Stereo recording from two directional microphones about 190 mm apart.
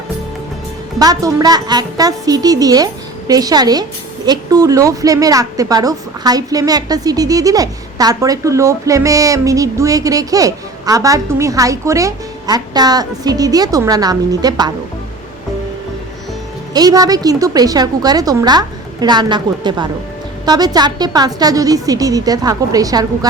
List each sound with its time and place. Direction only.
0.9 s a woman's voice: 20° right (ahead or behind)
16.7 s a woman's voice: 20° right (ahead or behind)